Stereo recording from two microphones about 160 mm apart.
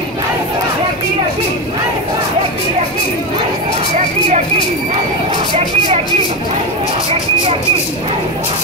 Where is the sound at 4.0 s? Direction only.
45° right (ahead or behind).